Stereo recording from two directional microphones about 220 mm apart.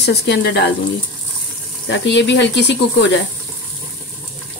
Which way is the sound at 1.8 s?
55° left (ahead or behind).